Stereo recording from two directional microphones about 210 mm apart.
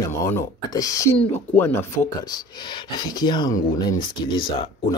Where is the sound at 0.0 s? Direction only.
15° left (ahead or behind).